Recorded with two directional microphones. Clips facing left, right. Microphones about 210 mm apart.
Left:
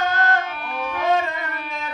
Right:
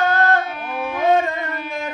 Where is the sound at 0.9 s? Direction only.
50° right (ahead or behind).